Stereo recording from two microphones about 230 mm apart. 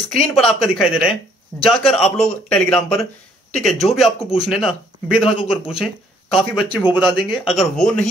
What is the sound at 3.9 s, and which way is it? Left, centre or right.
Speech, centre.